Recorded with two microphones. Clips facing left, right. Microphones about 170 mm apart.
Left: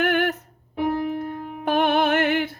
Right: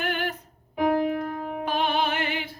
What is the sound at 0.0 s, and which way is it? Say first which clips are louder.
Music: left 7 dB; 60° left (ahead or behind).